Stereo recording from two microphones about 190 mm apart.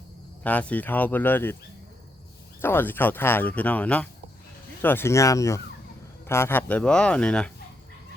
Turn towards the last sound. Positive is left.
turn(degrees=5)  # may be behind; listen again after turning